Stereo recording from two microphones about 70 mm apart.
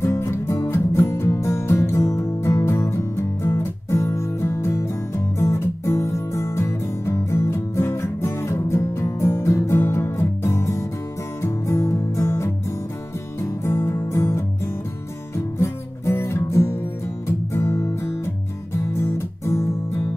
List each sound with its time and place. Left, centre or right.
0.0 s music: left